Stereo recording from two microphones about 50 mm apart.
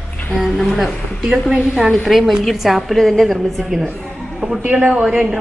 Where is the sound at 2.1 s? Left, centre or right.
Centre.